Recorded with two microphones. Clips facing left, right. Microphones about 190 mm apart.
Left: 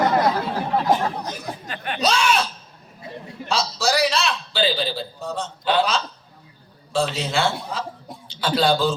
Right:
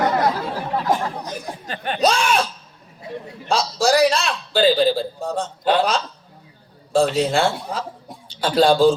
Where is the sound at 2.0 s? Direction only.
50° right (ahead or behind).